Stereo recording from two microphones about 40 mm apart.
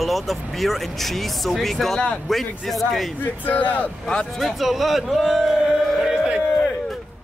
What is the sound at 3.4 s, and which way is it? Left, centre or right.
Speech, left.